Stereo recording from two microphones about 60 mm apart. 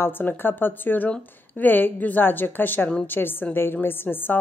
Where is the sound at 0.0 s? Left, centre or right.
Left.